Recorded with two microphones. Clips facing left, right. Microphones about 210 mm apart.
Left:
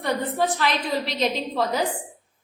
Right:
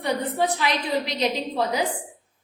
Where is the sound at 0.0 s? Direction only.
15° right (ahead or behind).